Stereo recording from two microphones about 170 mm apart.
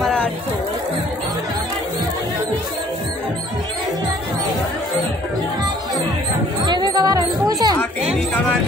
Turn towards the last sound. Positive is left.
turn(degrees=-20)  # may be behind; listen again after turning